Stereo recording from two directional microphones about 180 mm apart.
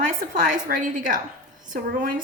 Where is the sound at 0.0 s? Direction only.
45° right (ahead or behind).